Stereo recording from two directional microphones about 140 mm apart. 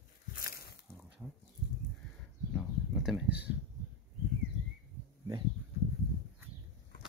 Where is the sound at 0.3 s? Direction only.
90° left.